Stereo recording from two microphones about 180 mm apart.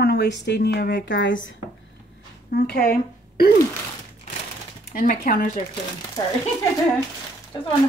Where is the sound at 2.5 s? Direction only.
60° left (ahead or behind).